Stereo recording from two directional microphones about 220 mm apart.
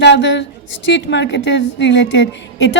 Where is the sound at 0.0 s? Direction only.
55° left (ahead or behind).